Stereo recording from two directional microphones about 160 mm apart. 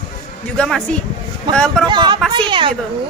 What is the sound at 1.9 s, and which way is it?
Speech, 30° right (ahead or behind).